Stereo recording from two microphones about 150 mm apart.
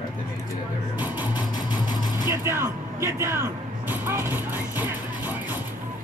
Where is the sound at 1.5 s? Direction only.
30° left (ahead or behind).